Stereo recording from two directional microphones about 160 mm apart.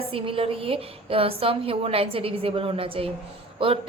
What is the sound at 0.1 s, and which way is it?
A woman's voice, 35° right (ahead or behind).